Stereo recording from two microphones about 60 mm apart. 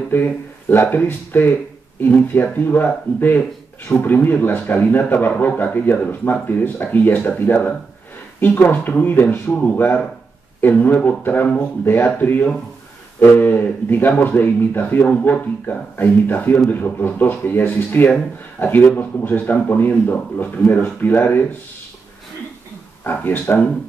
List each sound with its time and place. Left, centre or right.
0.1 s speech: left
23.0 s speech: left